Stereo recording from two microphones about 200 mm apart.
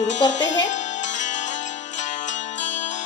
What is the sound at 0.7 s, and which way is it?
Zither, 35° left (ahead or behind).